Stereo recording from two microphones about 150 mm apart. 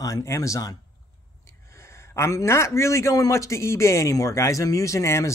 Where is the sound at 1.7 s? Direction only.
20° left (ahead or behind).